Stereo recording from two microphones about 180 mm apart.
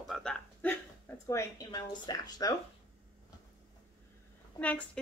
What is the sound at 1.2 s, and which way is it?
A woman's voice, 20° left (ahead or behind).